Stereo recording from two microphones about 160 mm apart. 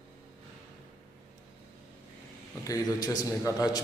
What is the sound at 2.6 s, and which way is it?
A man's voice, 20° left (ahead or behind).